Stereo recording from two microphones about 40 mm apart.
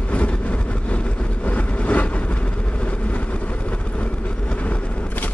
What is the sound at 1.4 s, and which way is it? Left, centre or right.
Vehicle, left.